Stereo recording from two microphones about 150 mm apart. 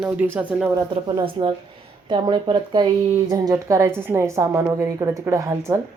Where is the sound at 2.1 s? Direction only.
30° right (ahead or behind).